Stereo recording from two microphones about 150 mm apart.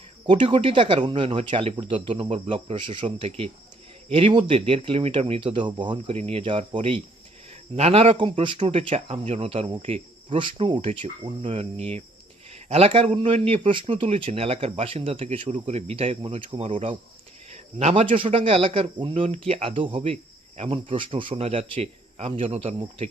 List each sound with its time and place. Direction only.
0.3 s a man's voice: 40° right (ahead or behind)
11.4 s cricket: 45° right (ahead or behind)
12.6 s a man's voice: 45° right (ahead or behind)